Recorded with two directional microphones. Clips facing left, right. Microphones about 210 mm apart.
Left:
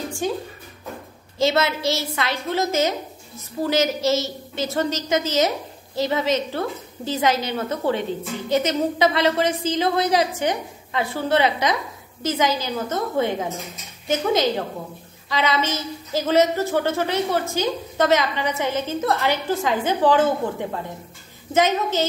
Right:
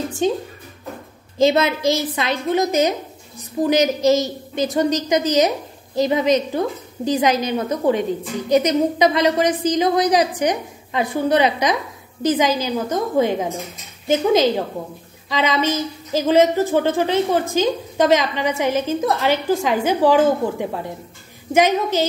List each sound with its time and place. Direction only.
0.2 s speech: 20° right (ahead or behind)
1.4 s a woman's voice: 15° right (ahead or behind)